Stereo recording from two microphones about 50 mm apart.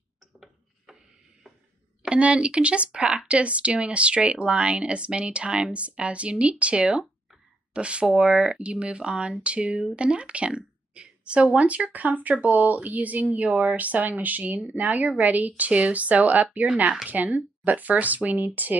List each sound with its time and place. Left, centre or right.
2.0 s speech: right